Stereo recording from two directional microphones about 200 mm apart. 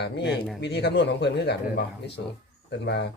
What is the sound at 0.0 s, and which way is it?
Speech, 55° left (ahead or behind).